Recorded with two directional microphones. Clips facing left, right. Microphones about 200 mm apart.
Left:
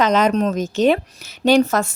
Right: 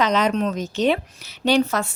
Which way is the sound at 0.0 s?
45° left (ahead or behind).